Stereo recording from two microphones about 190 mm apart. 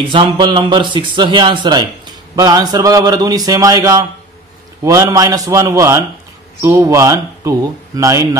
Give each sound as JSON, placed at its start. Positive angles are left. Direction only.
{"t": 0.1, "sound": "a man's voice", "side_deg": -25}